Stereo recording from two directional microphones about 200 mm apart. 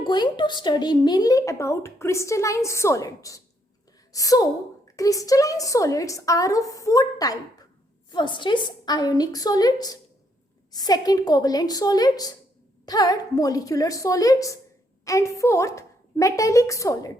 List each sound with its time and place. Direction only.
0.0 s a woman's voice: 20° left (ahead or behind)